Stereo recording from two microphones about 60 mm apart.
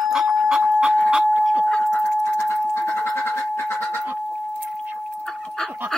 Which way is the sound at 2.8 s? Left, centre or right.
Left.